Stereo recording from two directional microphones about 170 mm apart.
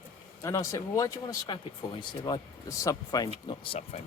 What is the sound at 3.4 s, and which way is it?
Speech, 30° left (ahead or behind).